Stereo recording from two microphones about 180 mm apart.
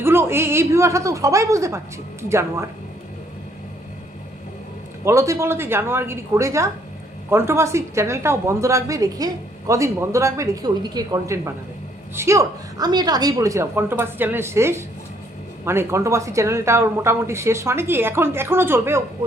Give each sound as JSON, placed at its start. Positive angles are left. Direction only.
{"t": 0.0, "sound": "a woman's voice", "side_deg": -15}
{"t": 5.0, "sound": "a woman's voice", "side_deg": -15}